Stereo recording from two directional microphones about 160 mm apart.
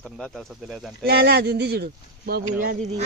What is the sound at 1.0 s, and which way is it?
Speech, 90° right.